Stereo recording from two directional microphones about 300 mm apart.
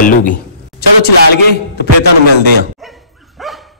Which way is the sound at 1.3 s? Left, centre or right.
Left.